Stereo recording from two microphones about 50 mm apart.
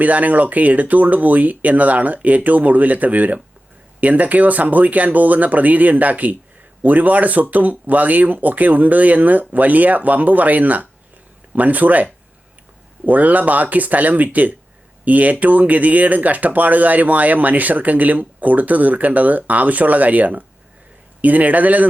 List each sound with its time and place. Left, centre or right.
0.0 s speech: right
13.1 s speech: right